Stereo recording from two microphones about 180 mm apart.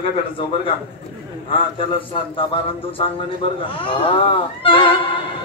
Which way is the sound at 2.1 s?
30° left (ahead or behind).